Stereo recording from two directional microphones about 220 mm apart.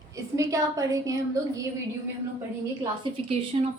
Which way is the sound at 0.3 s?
15° right (ahead or behind).